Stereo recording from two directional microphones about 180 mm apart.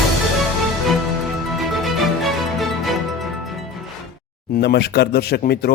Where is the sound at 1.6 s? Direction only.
Centre (ahead or behind).